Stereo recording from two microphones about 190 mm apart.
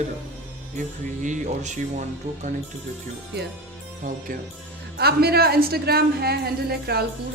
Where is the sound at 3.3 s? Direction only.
60° right (ahead or behind).